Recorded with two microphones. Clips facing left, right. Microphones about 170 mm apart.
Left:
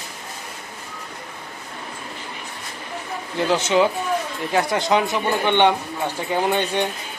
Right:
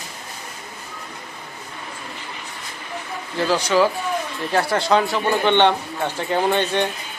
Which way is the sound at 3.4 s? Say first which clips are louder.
Even; 25° left (ahead or behind).